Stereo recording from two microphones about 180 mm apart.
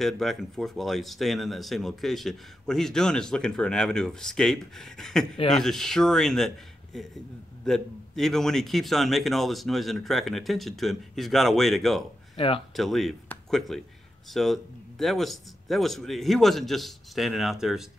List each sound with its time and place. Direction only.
0.0 s speech: centre (ahead or behind)
12.4 s speech: 30° left (ahead or behind)
12.7 s speech: centre (ahead or behind)